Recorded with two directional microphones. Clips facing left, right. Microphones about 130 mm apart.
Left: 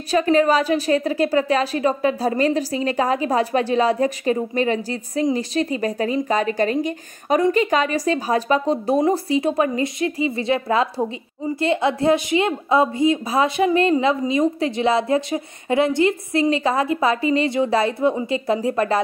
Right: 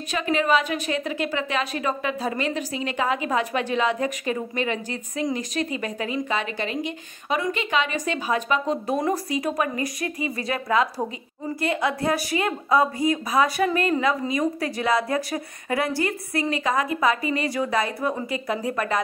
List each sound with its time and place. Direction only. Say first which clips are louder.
0.1 s a woman's voice: left 6 dB; 35° left (ahead or behind)